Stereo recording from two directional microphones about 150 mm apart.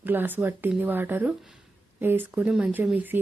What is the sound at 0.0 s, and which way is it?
Speech, 15° right (ahead or behind).